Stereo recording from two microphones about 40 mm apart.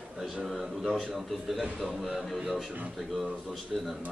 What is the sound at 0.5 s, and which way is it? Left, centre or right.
A man's voice, centre.